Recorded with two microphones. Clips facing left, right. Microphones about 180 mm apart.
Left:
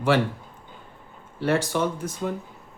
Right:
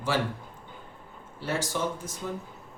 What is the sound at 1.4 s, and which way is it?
Speech, 65° left (ahead or behind).